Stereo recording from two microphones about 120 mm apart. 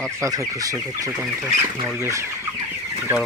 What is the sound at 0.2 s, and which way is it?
Speech, 30° right (ahead or behind).